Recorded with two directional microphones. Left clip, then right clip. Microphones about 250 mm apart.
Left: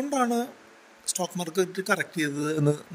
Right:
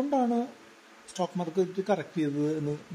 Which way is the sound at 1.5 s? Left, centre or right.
Left.